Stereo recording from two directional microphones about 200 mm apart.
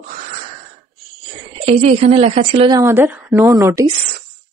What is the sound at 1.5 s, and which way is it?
A woman's voice, 30° right (ahead or behind).